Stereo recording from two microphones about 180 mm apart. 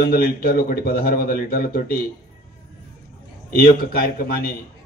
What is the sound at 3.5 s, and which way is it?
Speech, 55° left (ahead or behind).